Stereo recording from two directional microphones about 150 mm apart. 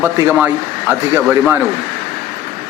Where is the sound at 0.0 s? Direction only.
15° right (ahead or behind).